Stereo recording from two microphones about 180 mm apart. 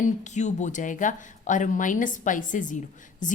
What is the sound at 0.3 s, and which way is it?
A woman's voice, 40° left (ahead or behind).